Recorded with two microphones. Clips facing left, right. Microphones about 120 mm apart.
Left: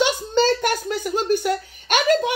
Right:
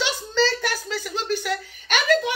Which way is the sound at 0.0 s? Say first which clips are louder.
Left 4 dB; 50° left (ahead or behind).